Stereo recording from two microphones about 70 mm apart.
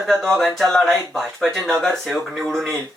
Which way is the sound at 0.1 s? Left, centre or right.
Centre.